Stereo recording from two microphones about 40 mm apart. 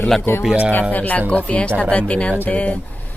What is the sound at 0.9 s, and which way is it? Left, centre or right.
Speech, left.